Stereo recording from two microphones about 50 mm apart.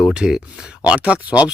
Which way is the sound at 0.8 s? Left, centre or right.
Right.